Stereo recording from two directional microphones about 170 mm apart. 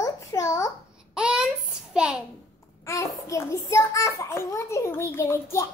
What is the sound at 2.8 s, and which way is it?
A child's voice, 20° left (ahead or behind).